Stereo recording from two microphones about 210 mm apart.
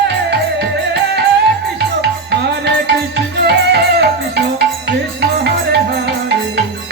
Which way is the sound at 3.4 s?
50° right (ahead or behind).